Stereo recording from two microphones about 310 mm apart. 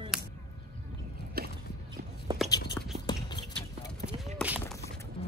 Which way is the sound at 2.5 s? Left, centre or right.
Centre.